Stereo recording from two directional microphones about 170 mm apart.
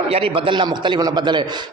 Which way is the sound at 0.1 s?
30° right (ahead or behind).